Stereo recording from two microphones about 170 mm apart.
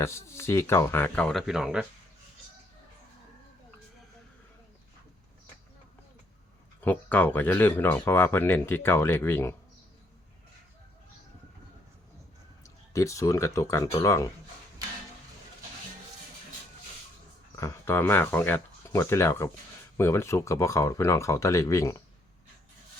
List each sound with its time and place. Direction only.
0.0 s speech: 15° left (ahead or behind); by 1.9 s 5° right (ahead or behind)
6.8 s speech: 10° left (ahead or behind)
12.6 s speech: 15° left (ahead or behind)
17.5 s speech: 15° left (ahead or behind)